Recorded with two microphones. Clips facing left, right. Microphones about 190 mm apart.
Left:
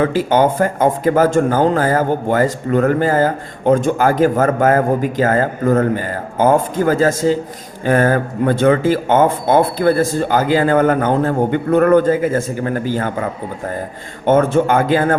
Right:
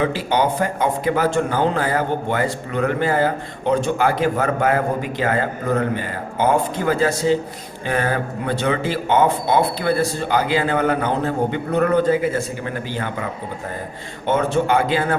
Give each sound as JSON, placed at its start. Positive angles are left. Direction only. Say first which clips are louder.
{"t": 0.0, "sound": "a man's voice", "louder": "left 5 dB", "side_deg": 45}
{"t": 14.3, "sound": "a man's voice", "louder": "left 6 dB", "side_deg": 50}